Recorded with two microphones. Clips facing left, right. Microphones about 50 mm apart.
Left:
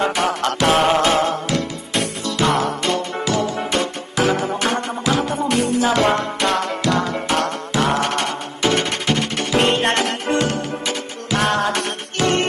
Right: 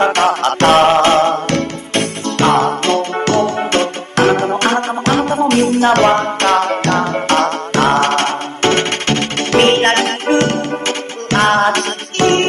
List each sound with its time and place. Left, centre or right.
0.0 s music: right
0.8 s music: right